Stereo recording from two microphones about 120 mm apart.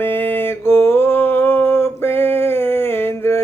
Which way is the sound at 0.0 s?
15° left (ahead or behind).